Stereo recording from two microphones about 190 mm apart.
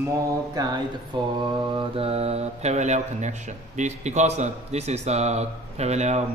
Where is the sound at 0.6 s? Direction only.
20° right (ahead or behind).